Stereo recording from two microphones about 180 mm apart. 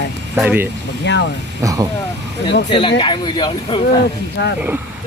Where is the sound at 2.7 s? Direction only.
25° left (ahead or behind).